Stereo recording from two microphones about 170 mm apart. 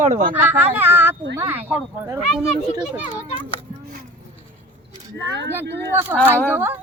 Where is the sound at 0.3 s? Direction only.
10° right (ahead or behind).